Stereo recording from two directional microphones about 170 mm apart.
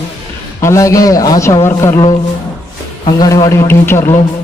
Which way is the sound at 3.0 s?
25° left (ahead or behind).